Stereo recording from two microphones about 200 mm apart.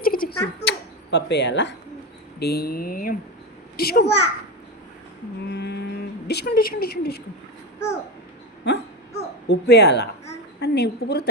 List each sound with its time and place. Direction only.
0.0 s a sound: 45° left (ahead or behind)
0.6 s a sound: 60° left (ahead or behind)
2.4 s speech: 50° left (ahead or behind)
4.0 s a child's voice: 30° left (ahead or behind)
5.5 s speech: 55° left (ahead or behind)
8.7 s a woman's voice: 55° left (ahead or behind)